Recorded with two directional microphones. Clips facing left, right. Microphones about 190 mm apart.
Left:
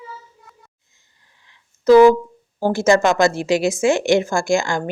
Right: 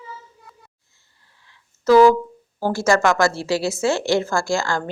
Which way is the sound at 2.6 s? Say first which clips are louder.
Left 3 dB; 20° left (ahead or behind).